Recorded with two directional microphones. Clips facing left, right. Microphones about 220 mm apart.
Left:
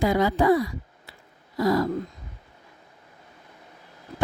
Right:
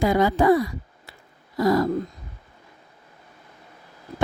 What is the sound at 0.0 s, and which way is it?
Speech, 50° right (ahead or behind).